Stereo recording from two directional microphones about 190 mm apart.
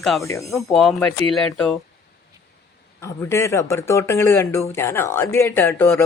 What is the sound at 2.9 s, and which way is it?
Speech, 15° left (ahead or behind).